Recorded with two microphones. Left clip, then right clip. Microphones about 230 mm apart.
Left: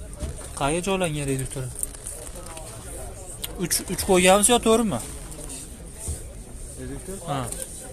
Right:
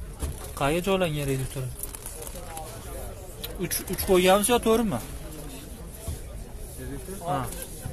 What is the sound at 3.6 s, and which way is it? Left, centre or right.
Speech, left.